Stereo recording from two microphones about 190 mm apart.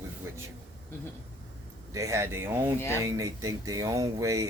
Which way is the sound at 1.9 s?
15° right (ahead or behind).